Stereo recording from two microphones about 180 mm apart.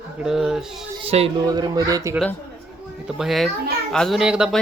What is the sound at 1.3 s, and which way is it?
Speech, 20° right (ahead or behind).